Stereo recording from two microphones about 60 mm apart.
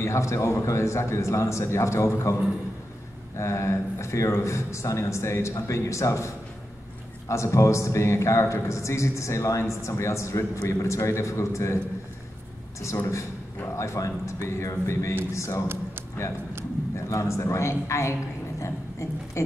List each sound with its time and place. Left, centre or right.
0.0 s a man's voice: left
3.3 s a man's voice: left
12.8 s a man's voice: left
17.1 s a man's voice: left